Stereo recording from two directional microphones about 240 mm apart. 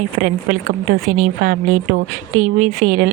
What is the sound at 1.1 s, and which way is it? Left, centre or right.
Speech, right.